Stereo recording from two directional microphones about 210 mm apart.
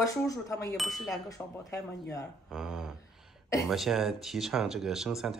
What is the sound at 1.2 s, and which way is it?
Speech, 15° left (ahead or behind).